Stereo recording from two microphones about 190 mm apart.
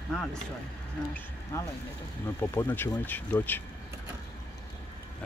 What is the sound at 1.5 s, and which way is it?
Speech, 15° left (ahead or behind).